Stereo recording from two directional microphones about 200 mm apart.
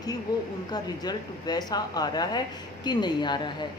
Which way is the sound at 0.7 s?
20° left (ahead or behind).